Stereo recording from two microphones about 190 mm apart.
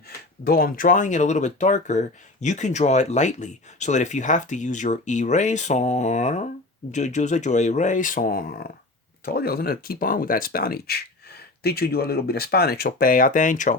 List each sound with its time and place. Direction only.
0.4 s speech: 50° left (ahead or behind)